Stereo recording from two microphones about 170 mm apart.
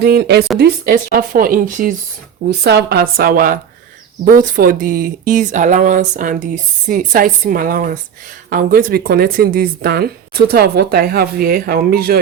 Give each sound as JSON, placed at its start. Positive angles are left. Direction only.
{"t": 0.0, "sound": "speech", "side_deg": -70}
{"t": 0.6, "sound": "speech", "side_deg": -60}
{"t": 2.6, "sound": "speech", "side_deg": -70}